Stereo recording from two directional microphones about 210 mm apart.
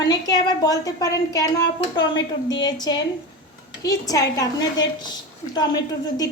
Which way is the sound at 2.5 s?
20° left (ahead or behind).